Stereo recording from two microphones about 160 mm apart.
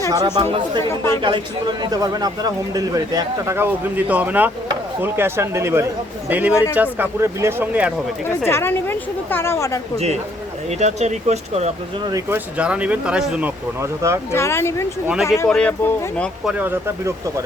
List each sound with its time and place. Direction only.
0.1 s speech: 25° right (ahead or behind)
0.9 s a woman's voice: 20° left (ahead or behind)
1.2 s speech: 30° right (ahead or behind); by 7.9 s 10° right (ahead or behind)
8.4 s a woman's voice: 15° left (ahead or behind)
10.7 s speech: 45° right (ahead or behind)
12.0 s speech: 20° right (ahead or behind)
12.5 s speech: 10° right (ahead or behind)
13.8 s speech: 15° right (ahead or behind)
14.3 s a woman's voice: 15° left (ahead or behind)
15.0 s a woman's voice: 5° right (ahead or behind)
16.5 s speech: 10° right (ahead or behind)